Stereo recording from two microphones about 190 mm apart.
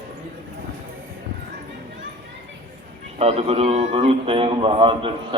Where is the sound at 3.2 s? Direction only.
30° right (ahead or behind).